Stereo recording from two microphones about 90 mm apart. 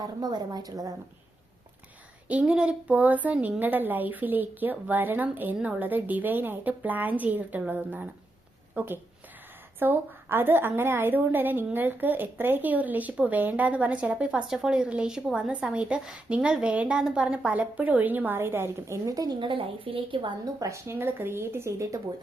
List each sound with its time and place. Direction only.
0.0 s a woman's voice: 45° right (ahead or behind)
2.4 s a woman's voice: 10° right (ahead or behind); by 19.4 s 40° right (ahead or behind)
19.4 s a woman's voice: 80° right
20.4 s speech: 35° right (ahead or behind)